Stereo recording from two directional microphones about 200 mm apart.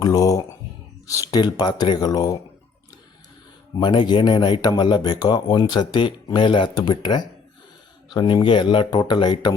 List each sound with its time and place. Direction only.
0.0 s speech: 20° left (ahead or behind)
3.8 s speech: 20° left (ahead or behind)